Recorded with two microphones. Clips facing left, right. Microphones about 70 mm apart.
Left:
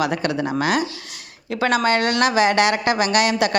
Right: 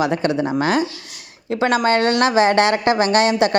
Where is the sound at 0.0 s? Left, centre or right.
Right.